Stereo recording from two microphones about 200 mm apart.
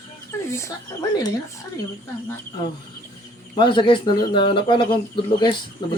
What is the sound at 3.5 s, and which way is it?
Speech, 25° left (ahead or behind).